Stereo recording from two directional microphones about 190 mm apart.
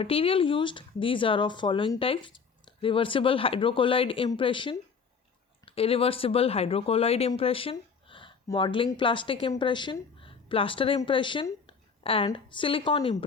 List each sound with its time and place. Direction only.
0.0 s speech: 30° left (ahead or behind)